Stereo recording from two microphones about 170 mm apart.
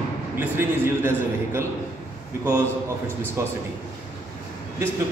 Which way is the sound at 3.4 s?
15° right (ahead or behind).